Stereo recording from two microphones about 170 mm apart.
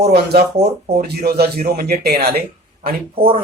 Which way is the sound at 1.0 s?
70° right (ahead or behind).